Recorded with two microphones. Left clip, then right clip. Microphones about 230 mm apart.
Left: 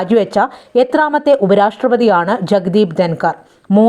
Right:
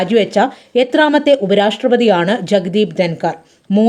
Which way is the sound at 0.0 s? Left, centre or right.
Centre.